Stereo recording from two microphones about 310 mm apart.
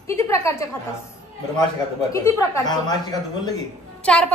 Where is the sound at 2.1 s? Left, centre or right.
Centre.